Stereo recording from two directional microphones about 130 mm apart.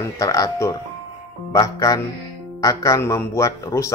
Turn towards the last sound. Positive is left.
turn(degrees=25)  # may be behind; listen again after turning